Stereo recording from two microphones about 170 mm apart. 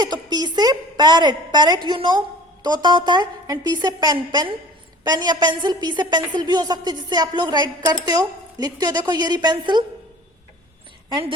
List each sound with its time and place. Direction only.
0.0 s a woman's voice: 25° right (ahead or behind)
11.1 s a woman's voice: 30° right (ahead or behind)